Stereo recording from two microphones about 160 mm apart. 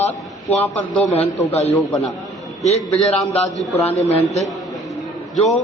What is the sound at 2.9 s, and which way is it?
Speech, 10° left (ahead or behind).